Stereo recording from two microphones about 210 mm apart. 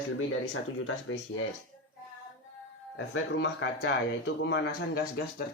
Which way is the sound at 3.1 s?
55° left (ahead or behind).